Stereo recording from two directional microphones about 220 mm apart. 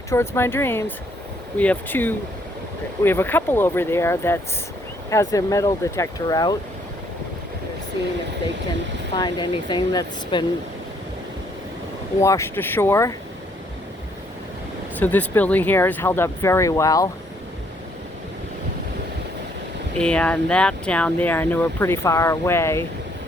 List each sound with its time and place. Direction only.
0.1 s speech: 10° left (ahead or behind)
9.1 s speech: 20° left (ahead or behind)
12.2 s speech: 15° left (ahead or behind)
14.9 s speech: 10° left (ahead or behind)
20.0 s speech: 5° left (ahead or behind)